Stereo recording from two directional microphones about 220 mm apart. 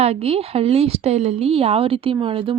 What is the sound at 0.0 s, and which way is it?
A woman's voice, 25° right (ahead or behind).